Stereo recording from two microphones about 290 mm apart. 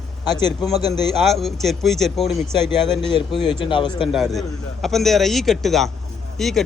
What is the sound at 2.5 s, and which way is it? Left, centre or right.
Speech, centre.